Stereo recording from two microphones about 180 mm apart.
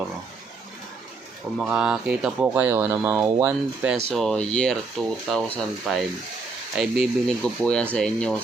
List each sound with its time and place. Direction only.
1.5 s speech: 5° right (ahead or behind)
4.1 s speech: 5° left (ahead or behind)